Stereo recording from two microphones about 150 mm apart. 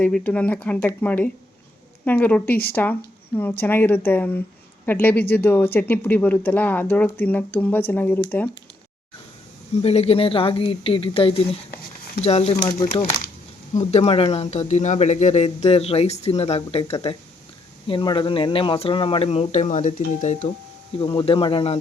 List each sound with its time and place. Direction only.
0.0 s speech: 10° left (ahead or behind)
9.8 s speech: 45° left (ahead or behind)
13.7 s speech: 45° left (ahead or behind)
20.9 s speech: 40° left (ahead or behind)